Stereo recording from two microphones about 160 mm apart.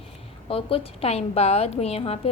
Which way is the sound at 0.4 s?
35° left (ahead or behind).